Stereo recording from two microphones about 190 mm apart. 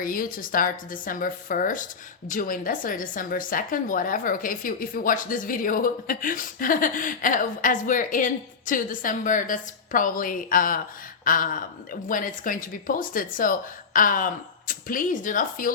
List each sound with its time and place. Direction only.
0.0 s speech: 50° left (ahead or behind)